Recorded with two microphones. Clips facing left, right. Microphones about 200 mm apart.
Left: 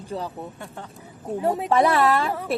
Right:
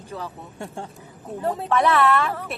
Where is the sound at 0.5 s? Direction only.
25° right (ahead or behind).